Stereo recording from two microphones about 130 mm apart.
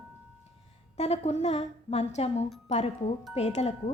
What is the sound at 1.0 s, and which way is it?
Speech, 55° left (ahead or behind).